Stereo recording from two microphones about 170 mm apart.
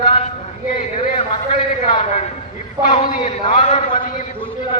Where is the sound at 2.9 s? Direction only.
30° left (ahead or behind).